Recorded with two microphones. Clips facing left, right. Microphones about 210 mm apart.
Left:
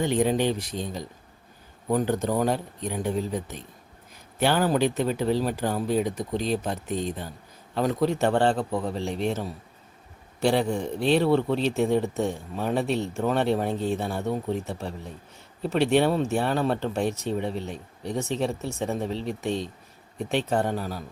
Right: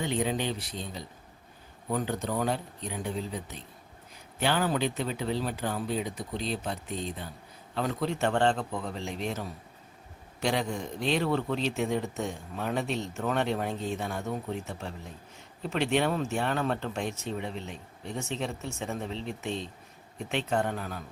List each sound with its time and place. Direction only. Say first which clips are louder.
0.0 s speech: left 7 dB; 45° left (ahead or behind); by 9.5 s 30° left (ahead or behind)
10.7 s speech: left 7 dB; 35° left (ahead or behind)